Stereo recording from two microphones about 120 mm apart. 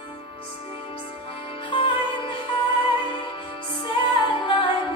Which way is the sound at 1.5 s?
45° left (ahead or behind).